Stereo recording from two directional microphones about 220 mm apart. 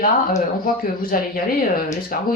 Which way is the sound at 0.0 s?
40° left (ahead or behind).